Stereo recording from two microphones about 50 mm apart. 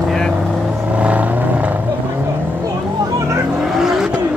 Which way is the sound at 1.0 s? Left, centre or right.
Right.